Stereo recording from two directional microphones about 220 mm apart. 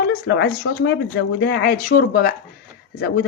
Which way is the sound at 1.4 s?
55° left (ahead or behind).